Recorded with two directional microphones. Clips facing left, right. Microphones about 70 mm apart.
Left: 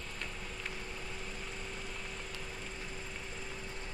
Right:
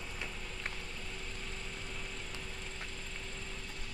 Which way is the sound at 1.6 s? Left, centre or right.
Centre.